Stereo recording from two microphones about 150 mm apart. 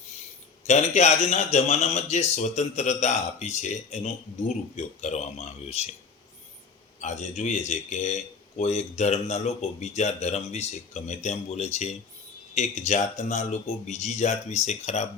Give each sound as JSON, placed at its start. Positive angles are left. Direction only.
{"t": 0.7, "sound": "speech", "side_deg": 50}
{"t": 7.0, "sound": "speech", "side_deg": 50}